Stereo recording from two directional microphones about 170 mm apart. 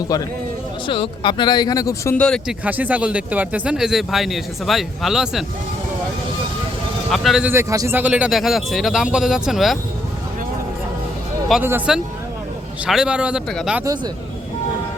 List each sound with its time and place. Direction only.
0.1 s speech: 20° left (ahead or behind)
2.2 s speech: 5° left (ahead or behind)
2.6 s speech: 10° right (ahead or behind)
7.1 s speech: centre (ahead or behind)
7.5 s speech: 15° right (ahead or behind); by 9.7 s centre (ahead or behind)
11.6 s speech: 15° right (ahead or behind)
13.8 s speech: 25° right (ahead or behind)